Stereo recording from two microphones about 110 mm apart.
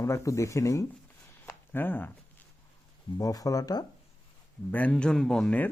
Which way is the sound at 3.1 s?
30° left (ahead or behind).